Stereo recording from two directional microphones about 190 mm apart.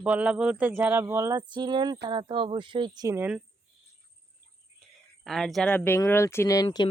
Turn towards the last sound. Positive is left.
turn(degrees=25)  # may be behind; listen again after turning